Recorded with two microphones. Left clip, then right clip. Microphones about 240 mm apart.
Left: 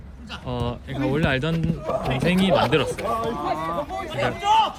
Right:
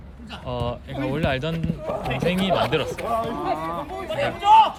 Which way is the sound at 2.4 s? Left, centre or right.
Centre.